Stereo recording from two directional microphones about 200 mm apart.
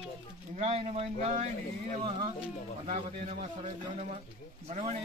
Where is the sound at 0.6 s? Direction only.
30° right (ahead or behind).